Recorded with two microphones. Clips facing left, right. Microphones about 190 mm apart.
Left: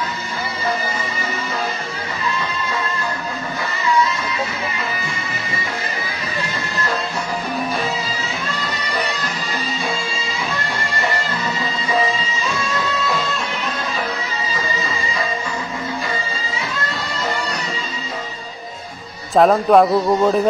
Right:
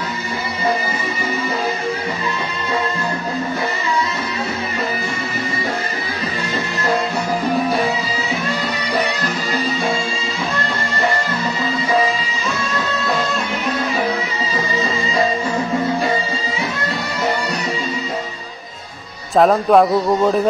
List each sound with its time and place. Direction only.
19.3 s speech: centre (ahead or behind)